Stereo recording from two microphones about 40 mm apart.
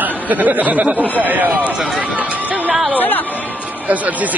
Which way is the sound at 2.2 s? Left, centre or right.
Right.